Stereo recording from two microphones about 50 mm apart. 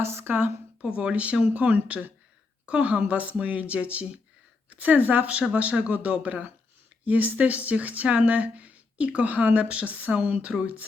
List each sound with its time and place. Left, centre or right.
0.0 s a woman's voice: right
0.8 s speech: right